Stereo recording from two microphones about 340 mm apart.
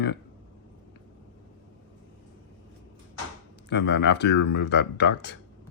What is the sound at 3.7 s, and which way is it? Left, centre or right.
Speech, left.